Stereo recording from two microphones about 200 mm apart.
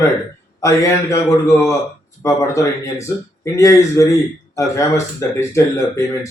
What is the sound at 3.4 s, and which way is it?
Speech, 15° left (ahead or behind).